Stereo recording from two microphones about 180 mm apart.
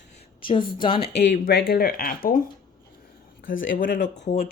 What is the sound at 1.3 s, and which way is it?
Speech, 60° left (ahead or behind).